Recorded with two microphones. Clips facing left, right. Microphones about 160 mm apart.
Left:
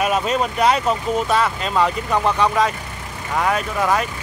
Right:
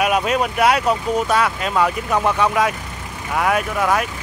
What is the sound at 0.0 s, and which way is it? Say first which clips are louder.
Speech: right 1 dB; 5° right (ahead or behind).